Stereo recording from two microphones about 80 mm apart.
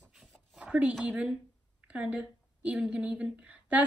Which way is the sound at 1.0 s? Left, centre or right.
Centre.